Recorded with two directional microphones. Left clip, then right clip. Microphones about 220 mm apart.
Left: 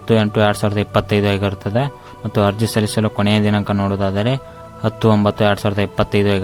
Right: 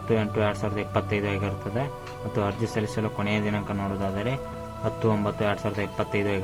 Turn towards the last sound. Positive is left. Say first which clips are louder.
# left 10 dB
turn(degrees=50)  # may be behind; listen again after turning